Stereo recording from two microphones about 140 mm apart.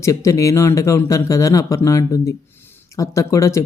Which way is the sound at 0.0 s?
20° left (ahead or behind).